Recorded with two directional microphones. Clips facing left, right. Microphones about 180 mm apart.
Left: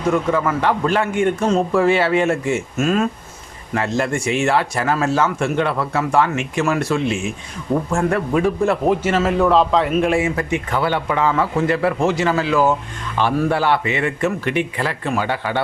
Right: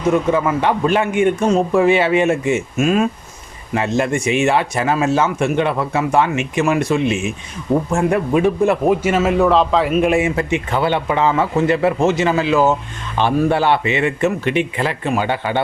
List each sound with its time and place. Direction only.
0.1 s a man's voice: 20° right (ahead or behind); by 10.0 s 5° right (ahead or behind)
10.0 s speech: 20° right (ahead or behind)